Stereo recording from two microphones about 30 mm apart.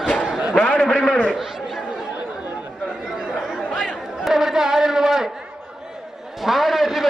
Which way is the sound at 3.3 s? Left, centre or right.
Centre.